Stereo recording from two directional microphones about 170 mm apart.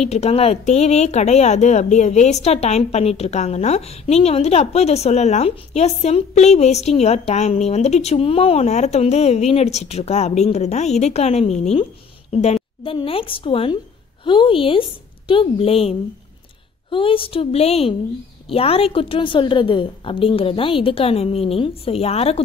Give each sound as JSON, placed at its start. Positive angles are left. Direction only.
{"t": 0.0, "sound": "speech", "side_deg": 40}